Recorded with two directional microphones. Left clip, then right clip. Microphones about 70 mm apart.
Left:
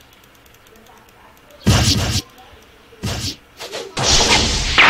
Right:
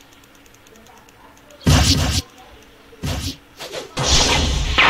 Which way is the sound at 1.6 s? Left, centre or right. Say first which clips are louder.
Even; centre.